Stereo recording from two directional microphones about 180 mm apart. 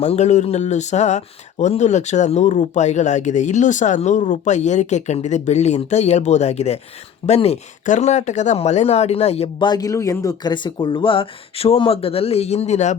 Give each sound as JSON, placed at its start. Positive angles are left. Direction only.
{"t": 0.0, "sound": "speech", "side_deg": 40}